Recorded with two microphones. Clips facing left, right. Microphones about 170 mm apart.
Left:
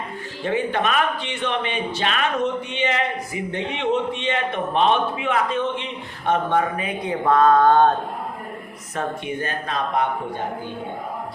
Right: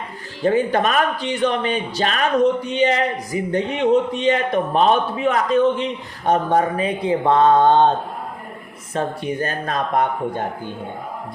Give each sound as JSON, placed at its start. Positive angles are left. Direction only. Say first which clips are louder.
{"t": 0.4, "sound": "speech", "louder": "right 5 dB", "side_deg": -40}
{"t": 9.0, "sound": "speech", "louder": "right 4 dB", "side_deg": -40}